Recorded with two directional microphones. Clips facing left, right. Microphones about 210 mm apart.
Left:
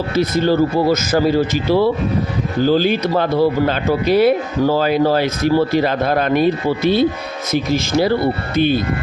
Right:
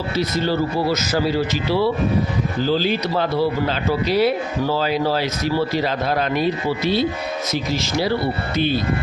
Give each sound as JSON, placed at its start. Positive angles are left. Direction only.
{"t": 0.2, "sound": "speech", "side_deg": 50}